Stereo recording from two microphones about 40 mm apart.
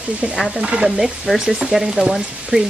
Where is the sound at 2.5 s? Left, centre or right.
Right.